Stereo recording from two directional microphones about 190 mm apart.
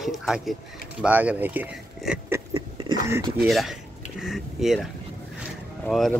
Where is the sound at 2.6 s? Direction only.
25° right (ahead or behind).